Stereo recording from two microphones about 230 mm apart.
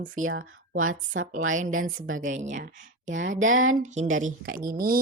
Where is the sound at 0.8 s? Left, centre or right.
Right.